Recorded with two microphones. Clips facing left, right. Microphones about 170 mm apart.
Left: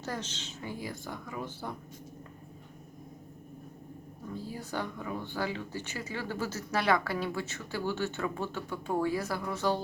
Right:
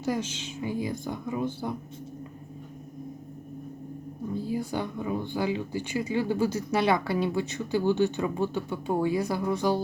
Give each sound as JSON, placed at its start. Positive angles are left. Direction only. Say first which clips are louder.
{"t": 0.0, "sound": "speech", "louder": "right 8 dB", "side_deg": -10}
{"t": 4.4, "sound": "speech", "louder": "right 5 dB", "side_deg": -15}